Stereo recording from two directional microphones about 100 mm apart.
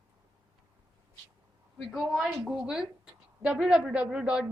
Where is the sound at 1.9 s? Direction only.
Centre (ahead or behind).